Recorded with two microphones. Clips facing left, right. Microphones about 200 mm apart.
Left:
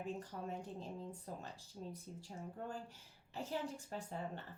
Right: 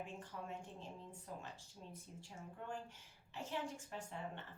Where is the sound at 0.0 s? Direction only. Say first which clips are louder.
Left 5 dB; 40° left (ahead or behind).